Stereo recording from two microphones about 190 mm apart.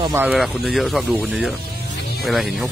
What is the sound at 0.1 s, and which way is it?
Speech, 10° right (ahead or behind).